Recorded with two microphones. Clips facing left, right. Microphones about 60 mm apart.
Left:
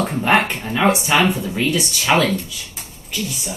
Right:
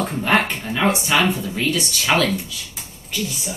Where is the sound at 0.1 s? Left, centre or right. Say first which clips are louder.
Left 2 dB; centre.